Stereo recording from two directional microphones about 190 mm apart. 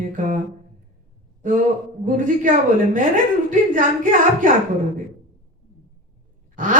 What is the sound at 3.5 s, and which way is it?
Speech, 45° right (ahead or behind).